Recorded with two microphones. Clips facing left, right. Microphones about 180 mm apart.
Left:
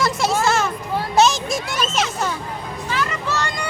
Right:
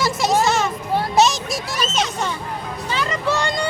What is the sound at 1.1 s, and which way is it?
A child's voice, centre (ahead or behind).